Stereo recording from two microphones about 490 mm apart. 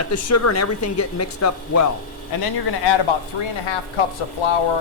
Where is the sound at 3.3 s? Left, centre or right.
Left.